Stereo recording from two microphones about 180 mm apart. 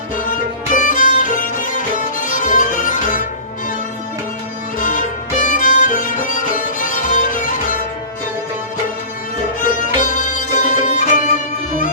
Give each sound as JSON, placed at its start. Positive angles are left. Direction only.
{"t": 0.2, "sound": "music", "side_deg": 50}
{"t": 4.8, "sound": "violin", "side_deg": 45}
{"t": 9.6, "sound": "music", "side_deg": 45}